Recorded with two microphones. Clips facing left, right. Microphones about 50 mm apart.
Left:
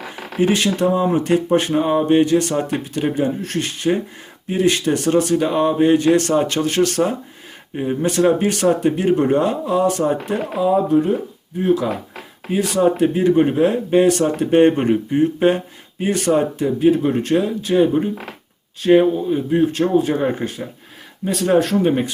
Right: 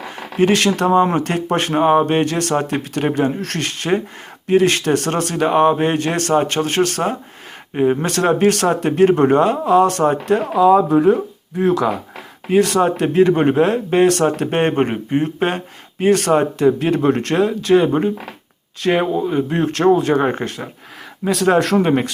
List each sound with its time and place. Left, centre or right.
0.3 s speech: right
7.8 s speech: right
12.5 s speech: right
14.5 s speech: right
18.8 s speech: right
20.2 s speech: right
21.2 s speech: right